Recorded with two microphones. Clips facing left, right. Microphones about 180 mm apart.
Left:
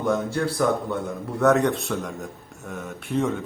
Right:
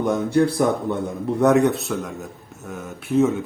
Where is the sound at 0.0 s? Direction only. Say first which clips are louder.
Right 5 dB; 20° right (ahead or behind).